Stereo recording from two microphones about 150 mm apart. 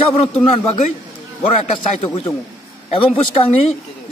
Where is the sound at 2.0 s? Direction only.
40° left (ahead or behind).